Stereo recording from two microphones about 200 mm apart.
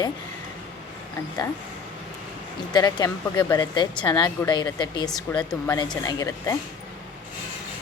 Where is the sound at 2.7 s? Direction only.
20° left (ahead or behind).